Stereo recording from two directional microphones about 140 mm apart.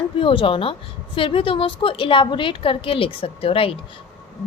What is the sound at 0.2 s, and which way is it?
A woman's voice, 40° left (ahead or behind).